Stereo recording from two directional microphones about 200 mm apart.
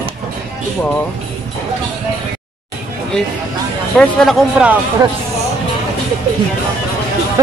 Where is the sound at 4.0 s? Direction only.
Centre (ahead or behind).